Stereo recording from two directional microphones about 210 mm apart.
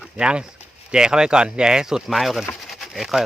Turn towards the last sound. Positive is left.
turn(degrees=0)  # may be behind; listen again after turning